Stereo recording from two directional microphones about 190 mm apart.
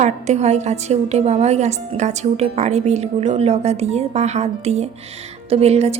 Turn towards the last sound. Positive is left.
turn(degrees=-35)  # may be behind; listen again after turning